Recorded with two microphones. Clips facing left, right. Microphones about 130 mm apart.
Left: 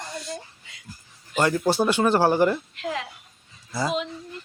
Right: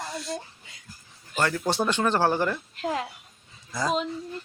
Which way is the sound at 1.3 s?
15° left (ahead or behind).